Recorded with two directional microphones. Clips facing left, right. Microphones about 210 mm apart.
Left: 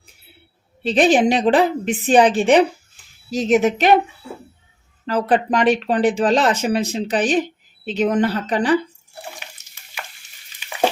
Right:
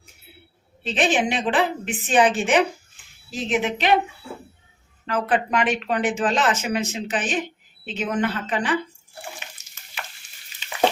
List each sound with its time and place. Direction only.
0.9 s speech: 40° left (ahead or behind)
5.0 s speech: 35° left (ahead or behind)